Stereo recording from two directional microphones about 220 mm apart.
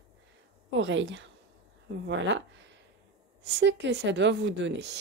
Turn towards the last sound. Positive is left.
turn(degrees=-55)  # may be behind; listen again after turning